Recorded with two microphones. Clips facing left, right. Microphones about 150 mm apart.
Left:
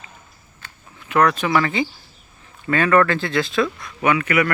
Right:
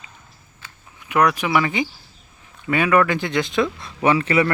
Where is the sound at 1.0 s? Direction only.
15° right (ahead or behind).